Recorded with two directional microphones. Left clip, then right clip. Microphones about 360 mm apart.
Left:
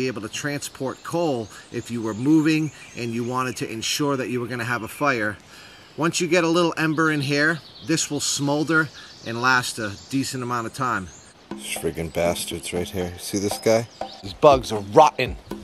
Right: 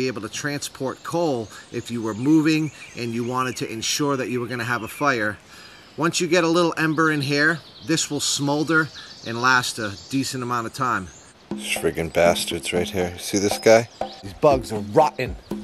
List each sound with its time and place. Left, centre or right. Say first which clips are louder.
0.0 s speech: right 1 dB; centre